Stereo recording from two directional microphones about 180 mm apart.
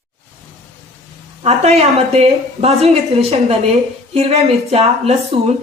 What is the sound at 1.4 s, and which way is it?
Speech, 35° right (ahead or behind).